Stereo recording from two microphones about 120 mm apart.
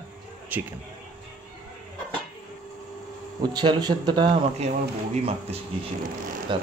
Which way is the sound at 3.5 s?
40° right (ahead or behind).